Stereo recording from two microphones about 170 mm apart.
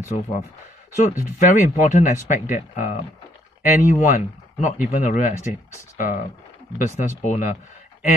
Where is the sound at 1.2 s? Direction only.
50° left (ahead or behind).